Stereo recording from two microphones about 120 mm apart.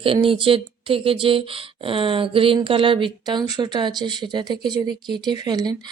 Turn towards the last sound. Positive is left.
turn(degrees=-35)  # may be behind; listen again after turning